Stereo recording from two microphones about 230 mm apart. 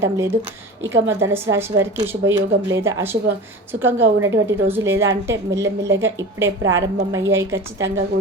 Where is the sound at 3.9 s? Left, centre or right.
Centre.